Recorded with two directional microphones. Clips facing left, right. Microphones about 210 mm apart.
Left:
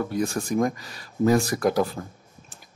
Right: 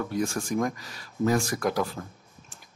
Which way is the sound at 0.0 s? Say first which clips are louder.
Left 3 dB; 35° left (ahead or behind).